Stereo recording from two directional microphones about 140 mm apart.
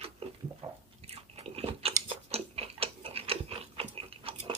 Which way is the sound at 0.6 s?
45° right (ahead or behind).